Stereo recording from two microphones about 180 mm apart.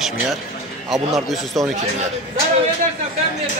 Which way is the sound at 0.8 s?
Centre (ahead or behind).